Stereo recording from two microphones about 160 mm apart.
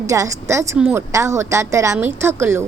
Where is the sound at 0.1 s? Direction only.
20° right (ahead or behind).